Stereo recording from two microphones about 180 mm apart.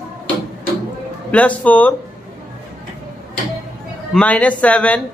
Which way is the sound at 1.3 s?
10° left (ahead or behind).